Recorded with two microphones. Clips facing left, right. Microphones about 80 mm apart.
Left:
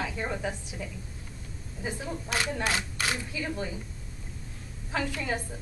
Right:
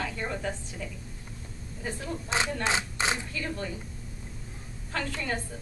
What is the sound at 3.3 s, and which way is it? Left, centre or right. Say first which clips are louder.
Speech: left 1 dB; centre.